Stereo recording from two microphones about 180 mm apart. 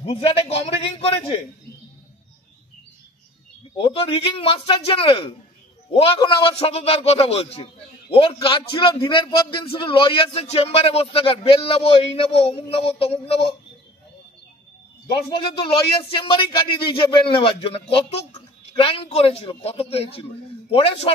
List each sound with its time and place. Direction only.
0.0 s speech: 30° left (ahead or behind)
3.7 s speech: 30° left (ahead or behind)
15.2 s speech: 30° left (ahead or behind)